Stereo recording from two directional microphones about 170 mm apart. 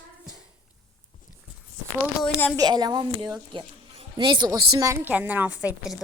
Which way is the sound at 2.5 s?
25° right (ahead or behind).